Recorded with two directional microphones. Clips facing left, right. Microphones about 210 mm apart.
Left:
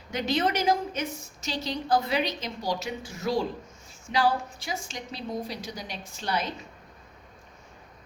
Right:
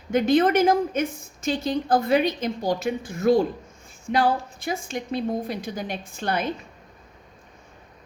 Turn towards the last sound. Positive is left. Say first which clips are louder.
# right 4 dB
turn(degrees=-55)  # may be behind; listen again after turning